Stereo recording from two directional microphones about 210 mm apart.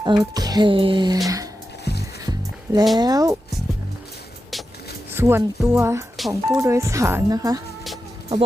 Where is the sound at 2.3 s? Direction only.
20° right (ahead or behind).